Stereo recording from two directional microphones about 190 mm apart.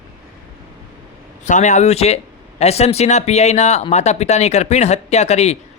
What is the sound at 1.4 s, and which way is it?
Speech, 40° left (ahead or behind).